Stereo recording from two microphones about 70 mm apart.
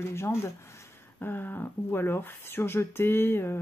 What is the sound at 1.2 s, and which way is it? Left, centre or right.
Speech, left.